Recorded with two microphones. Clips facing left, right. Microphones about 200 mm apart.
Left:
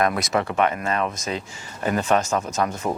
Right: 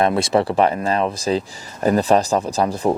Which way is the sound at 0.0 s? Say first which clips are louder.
Right 5 dB; 30° right (ahead or behind).